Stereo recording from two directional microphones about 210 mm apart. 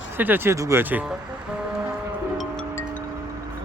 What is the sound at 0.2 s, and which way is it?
Speech, 10° right (ahead or behind).